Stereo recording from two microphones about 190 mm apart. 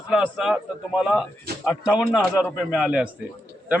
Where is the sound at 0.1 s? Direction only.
5° right (ahead or behind).